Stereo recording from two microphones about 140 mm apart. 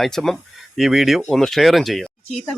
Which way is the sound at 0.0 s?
5° left (ahead or behind).